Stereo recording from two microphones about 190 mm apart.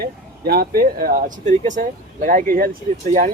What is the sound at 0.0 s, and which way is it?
Speech, 55° right (ahead or behind).